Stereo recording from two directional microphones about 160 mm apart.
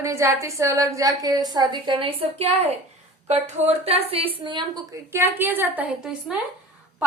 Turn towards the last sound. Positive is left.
turn(degrees=-5)  # may be behind; listen again after turning